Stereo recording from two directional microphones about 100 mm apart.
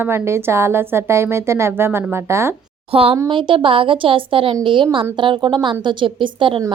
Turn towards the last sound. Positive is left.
turn(degrees=-60)  # may be behind; listen again after turning